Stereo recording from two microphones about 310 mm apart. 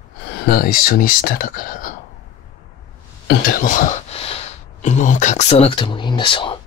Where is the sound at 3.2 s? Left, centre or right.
Left.